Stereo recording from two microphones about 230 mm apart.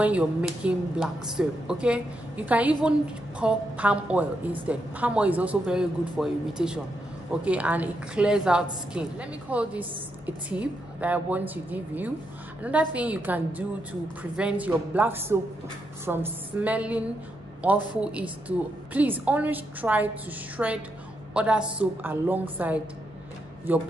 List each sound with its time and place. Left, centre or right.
0.0 s a woman's voice: centre